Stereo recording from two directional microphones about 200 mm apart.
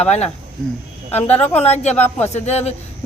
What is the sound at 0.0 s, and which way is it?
Speech, 30° left (ahead or behind).